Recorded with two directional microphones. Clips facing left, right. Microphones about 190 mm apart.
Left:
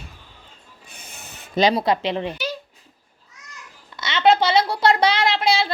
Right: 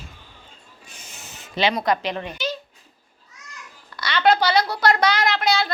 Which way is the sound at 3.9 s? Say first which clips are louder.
Left 2 dB; 20° left (ahead or behind).